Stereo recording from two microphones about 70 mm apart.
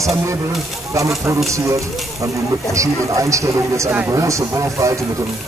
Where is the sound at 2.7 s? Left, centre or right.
Right.